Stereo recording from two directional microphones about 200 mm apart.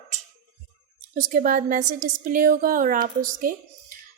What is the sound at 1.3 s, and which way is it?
A woman's voice, 45° right (ahead or behind).